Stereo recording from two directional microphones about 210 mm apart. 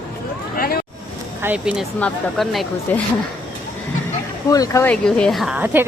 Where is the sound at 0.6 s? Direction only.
45° left (ahead or behind).